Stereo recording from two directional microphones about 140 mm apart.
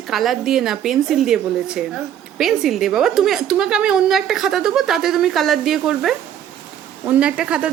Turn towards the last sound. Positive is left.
turn(degrees=-5)  # may be behind; listen again after turning